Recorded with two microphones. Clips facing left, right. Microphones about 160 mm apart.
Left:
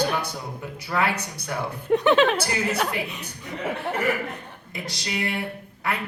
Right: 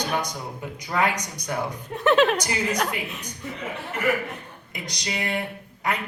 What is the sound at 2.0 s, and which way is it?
A woman's voice, centre (ahead or behind).